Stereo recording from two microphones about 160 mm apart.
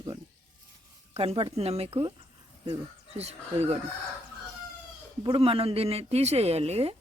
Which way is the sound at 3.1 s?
40° right (ahead or behind).